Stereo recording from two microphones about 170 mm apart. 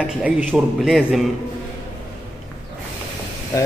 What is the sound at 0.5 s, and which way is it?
Speech, 5° right (ahead or behind).